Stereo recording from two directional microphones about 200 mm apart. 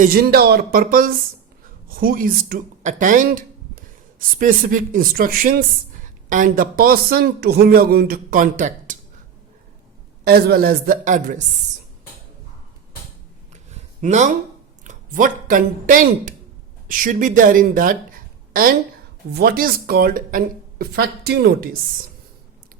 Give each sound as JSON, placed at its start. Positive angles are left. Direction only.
{"t": 0.0, "sound": "speech", "side_deg": -50}
{"t": 4.4, "sound": "speech", "side_deg": -45}
{"t": 10.2, "sound": "speech", "side_deg": -50}
{"t": 13.5, "sound": "a sound", "side_deg": -35}
{"t": 14.8, "sound": "a woman's voice", "side_deg": -40}